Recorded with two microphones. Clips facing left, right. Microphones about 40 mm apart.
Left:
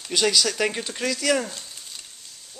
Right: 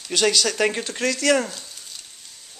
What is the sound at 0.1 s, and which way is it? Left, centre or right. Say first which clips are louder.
Speech: right 2 dB; centre.